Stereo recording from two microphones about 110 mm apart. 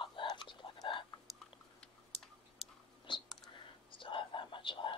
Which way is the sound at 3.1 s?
45° left (ahead or behind).